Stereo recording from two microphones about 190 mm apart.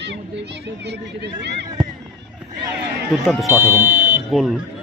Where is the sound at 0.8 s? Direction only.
60° right (ahead or behind).